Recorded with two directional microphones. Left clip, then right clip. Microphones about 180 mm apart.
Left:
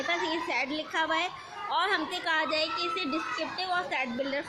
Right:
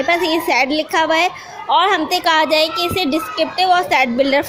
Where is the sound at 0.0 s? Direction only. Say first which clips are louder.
Right 14 dB; 30° right (ahead or behind).